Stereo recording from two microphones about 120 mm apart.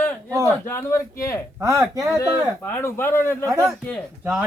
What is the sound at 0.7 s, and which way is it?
Speech, 20° left (ahead or behind).